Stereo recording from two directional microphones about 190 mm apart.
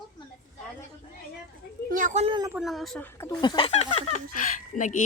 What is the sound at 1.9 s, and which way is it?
Speech, 40° right (ahead or behind).